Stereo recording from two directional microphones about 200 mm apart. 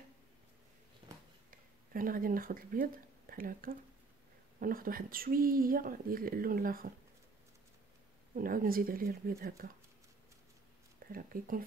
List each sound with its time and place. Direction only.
1.5 s speech: 45° right (ahead or behind)
8.4 s speech: 45° right (ahead or behind)
11.1 s speech: 45° right (ahead or behind)